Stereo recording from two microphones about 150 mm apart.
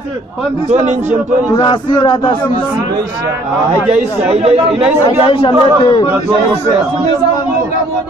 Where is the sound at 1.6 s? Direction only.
30° left (ahead or behind).